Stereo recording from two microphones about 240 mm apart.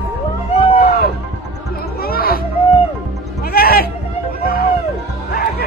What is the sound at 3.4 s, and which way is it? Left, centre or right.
Music, left.